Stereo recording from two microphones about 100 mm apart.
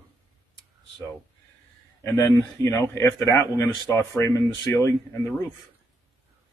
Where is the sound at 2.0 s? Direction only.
25° left (ahead or behind).